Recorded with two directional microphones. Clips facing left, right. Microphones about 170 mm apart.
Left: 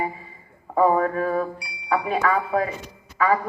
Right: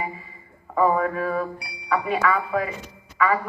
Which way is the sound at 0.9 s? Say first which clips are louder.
Left 2 dB; 35° left (ahead or behind).